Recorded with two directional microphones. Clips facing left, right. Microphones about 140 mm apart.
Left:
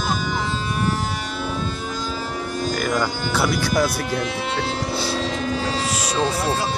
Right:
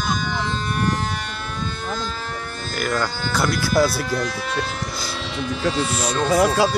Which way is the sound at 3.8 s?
15° left (ahead or behind).